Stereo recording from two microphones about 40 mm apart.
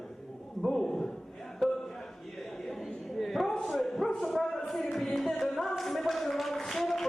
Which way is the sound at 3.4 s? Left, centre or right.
Centre.